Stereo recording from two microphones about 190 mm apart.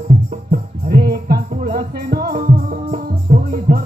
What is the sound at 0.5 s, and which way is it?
Music, 55° right (ahead or behind).